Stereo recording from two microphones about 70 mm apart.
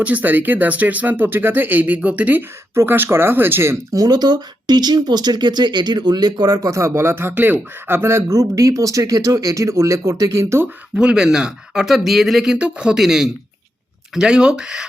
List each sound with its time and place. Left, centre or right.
0.0 s speech: right
2.7 s speech: right
3.9 s speech: right
10.9 s speech: centre
12.5 s speech: centre